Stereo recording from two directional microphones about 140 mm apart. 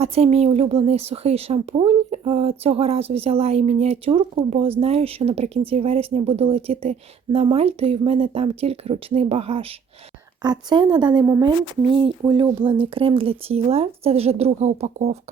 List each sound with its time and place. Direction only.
0.0 s speech: 45° right (ahead or behind)
10.4 s speech: 30° right (ahead or behind); by 15.2 s 50° right (ahead or behind)